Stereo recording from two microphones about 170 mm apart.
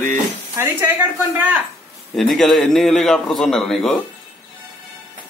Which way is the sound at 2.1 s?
Centre (ahead or behind).